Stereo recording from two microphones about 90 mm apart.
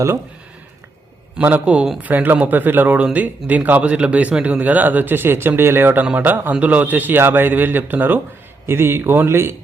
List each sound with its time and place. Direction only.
1.4 s a man's voice: 15° right (ahead or behind)